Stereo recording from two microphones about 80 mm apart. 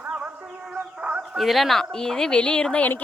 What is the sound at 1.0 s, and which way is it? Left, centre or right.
Chicken, centre.